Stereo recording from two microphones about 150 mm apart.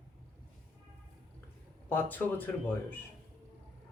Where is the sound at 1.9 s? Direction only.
10° left (ahead or behind).